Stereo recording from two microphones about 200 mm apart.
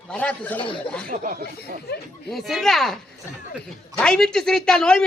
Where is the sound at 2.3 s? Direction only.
Centre (ahead or behind).